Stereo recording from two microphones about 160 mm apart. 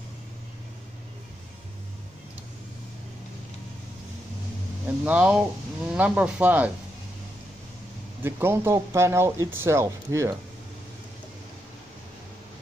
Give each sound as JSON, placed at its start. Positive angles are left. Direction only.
{"t": 5.0, "sound": "speech", "side_deg": -10}
{"t": 8.2, "sound": "speech", "side_deg": -15}